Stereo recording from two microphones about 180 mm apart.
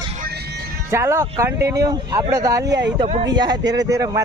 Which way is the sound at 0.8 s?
15° right (ahead or behind).